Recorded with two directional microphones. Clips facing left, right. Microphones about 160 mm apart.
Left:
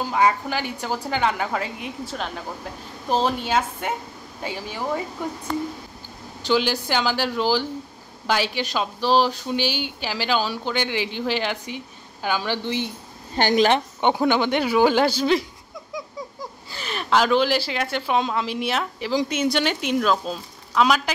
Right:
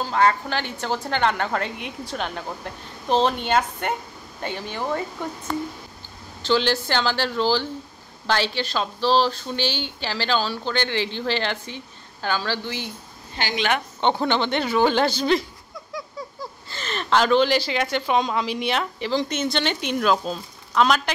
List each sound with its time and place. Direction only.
0.0 s speech: 10° left (ahead or behind)
6.4 s speech: 10° left (ahead or behind)
13.4 s a woman's voice: 45° left (ahead or behind)
14.0 s speech: 10° left (ahead or behind)